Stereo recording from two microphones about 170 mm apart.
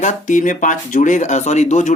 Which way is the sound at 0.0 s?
45° left (ahead or behind).